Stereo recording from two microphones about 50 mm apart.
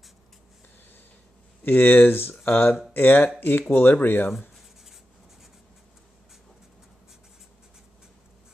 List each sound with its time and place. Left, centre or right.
1.6 s speech: left